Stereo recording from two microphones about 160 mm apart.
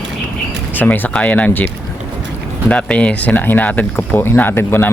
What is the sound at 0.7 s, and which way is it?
Speech, 10° left (ahead or behind).